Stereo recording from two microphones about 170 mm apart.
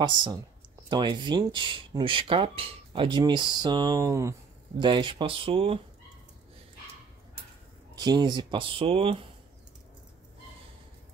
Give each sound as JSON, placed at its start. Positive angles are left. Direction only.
{"t": 0.8, "sound": "speech", "side_deg": -25}
{"t": 4.7, "sound": "speech", "side_deg": -30}
{"t": 7.9, "sound": "speech", "side_deg": -25}